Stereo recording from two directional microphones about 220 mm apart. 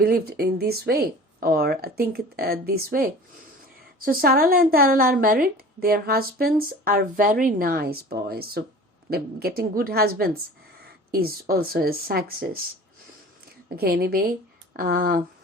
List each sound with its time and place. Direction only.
0.0 s a woman's voice: 45° right (ahead or behind)
13.7 s speech: 45° right (ahead or behind)